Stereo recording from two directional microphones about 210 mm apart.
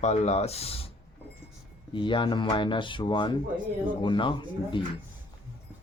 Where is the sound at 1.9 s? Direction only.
25° left (ahead or behind).